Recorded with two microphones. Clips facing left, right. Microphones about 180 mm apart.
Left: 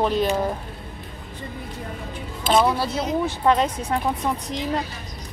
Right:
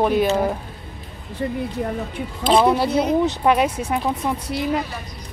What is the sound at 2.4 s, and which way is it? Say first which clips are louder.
Speech: right 3 dB; centre (ahead or behind).